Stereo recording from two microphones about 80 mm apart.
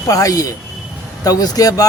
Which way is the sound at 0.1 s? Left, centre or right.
Left.